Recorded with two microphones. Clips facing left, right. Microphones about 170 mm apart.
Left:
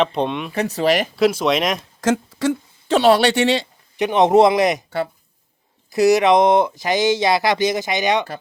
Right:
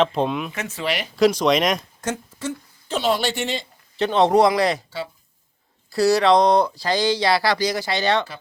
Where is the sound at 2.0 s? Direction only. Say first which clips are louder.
Left 9 dB; 90° left; by 3.6 s 75° left (ahead or behind).